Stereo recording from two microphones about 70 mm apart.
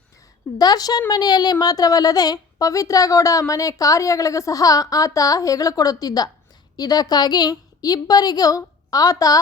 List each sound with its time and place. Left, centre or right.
0.6 s a woman's voice: left
1.1 s a woman's voice: left